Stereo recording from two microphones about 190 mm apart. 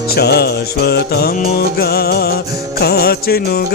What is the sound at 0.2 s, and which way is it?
Music, 55° left (ahead or behind).